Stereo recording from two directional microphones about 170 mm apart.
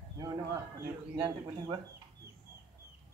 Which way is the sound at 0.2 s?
25° right (ahead or behind).